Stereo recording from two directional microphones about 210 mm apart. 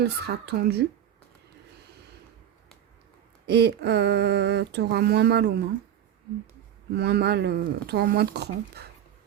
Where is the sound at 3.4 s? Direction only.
55° right (ahead or behind).